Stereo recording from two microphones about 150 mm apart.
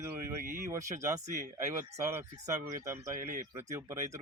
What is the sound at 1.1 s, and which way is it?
Speech, 50° right (ahead or behind).